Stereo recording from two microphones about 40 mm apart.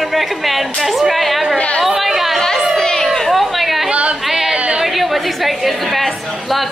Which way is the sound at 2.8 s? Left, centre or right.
Centre.